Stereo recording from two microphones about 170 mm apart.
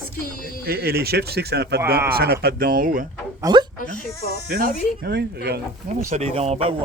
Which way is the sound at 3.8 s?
55° left (ahead or behind).